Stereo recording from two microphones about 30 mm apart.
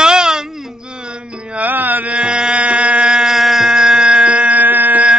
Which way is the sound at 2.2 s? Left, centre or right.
Right.